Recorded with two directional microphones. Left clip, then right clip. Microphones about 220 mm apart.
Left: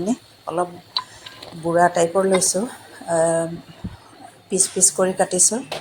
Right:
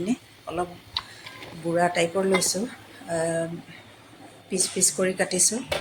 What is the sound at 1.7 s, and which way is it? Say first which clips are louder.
Speech: left 6 dB; 15° left (ahead or behind).